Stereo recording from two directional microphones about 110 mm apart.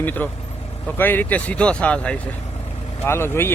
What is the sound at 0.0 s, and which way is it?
Speech, 15° left (ahead or behind).